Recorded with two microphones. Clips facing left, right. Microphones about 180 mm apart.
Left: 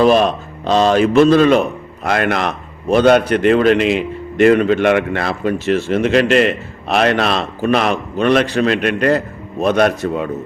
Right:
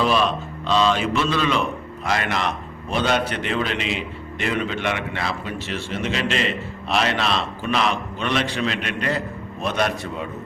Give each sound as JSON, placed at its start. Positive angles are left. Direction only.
{"t": 0.0, "sound": "a man's voice", "side_deg": 50}